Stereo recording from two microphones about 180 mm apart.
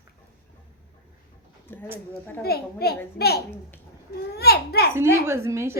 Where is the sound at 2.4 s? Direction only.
60° left (ahead or behind).